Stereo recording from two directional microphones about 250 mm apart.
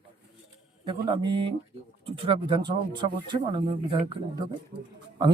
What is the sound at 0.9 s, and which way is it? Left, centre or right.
Speech, centre.